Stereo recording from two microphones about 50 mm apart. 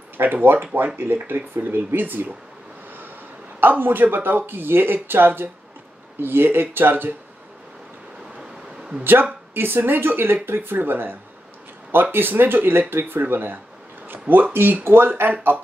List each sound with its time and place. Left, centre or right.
0.2 s speech: right
3.6 s speech: right
8.4 s a sound: centre
9.5 s speech: right